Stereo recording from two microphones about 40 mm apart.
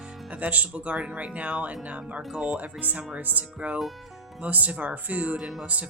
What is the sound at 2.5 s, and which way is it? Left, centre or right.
Speech, right.